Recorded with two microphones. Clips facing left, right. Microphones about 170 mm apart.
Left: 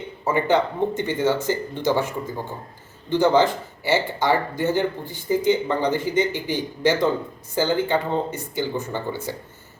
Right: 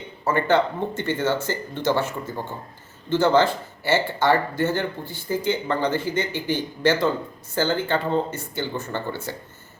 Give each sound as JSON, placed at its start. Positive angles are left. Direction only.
{"t": 0.3, "sound": "speech", "side_deg": 15}